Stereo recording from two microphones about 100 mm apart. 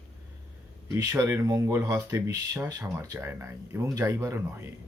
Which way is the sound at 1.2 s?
30° right (ahead or behind).